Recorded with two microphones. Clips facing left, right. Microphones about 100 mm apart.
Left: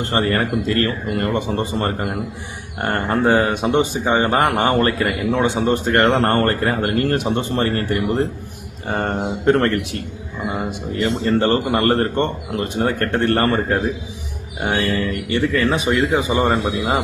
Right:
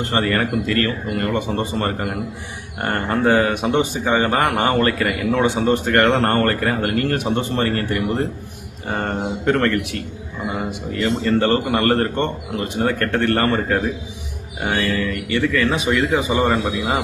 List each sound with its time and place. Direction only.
0.0 s a man's voice: 30° left (ahead or behind)